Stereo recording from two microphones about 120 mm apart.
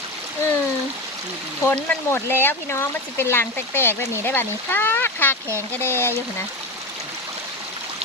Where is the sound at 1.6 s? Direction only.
15° left (ahead or behind).